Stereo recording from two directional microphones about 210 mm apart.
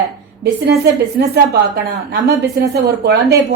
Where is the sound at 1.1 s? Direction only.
50° right (ahead or behind).